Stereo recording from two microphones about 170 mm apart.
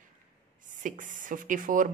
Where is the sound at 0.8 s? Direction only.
50° right (ahead or behind).